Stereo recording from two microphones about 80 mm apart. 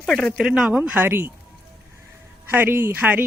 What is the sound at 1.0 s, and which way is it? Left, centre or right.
Speech, right.